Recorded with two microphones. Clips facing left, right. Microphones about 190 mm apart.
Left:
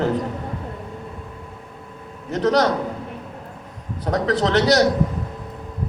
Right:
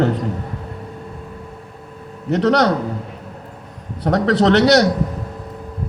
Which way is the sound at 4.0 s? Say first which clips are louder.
Right 5 dB; 70° right (ahead or behind).